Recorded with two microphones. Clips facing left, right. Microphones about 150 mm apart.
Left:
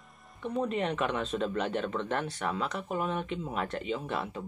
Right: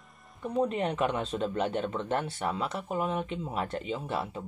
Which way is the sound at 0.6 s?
30° right (ahead or behind).